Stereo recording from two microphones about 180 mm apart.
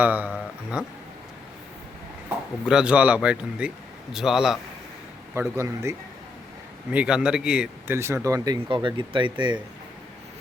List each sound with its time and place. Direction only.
0.0 s speech: 10° right (ahead or behind)
2.6 s a man's voice: 5° right (ahead or behind)
5.3 s speech: 15° right (ahead or behind)
6.9 s speech: 5° right (ahead or behind); by 9.6 s 25° right (ahead or behind)